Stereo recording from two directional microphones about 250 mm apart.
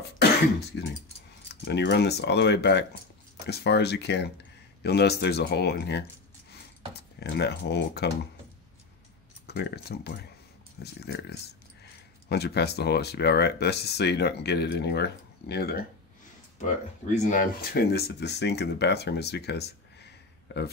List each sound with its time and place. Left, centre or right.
0.7 s speech: left
7.2 s speech: left
9.5 s speech: left
17.1 s speech: left